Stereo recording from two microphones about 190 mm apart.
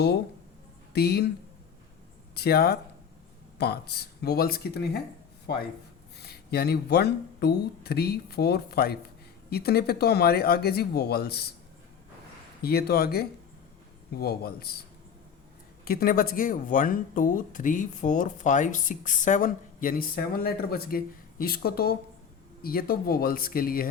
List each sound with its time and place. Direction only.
0.9 s speech: 55° left (ahead or behind)
2.3 s speech: 55° left (ahead or behind)
6.2 s speech: 55° left (ahead or behind)
12.6 s speech: 55° left (ahead or behind)